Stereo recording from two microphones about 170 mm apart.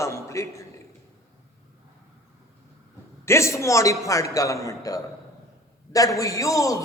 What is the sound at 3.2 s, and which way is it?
A man's voice, 15° left (ahead or behind).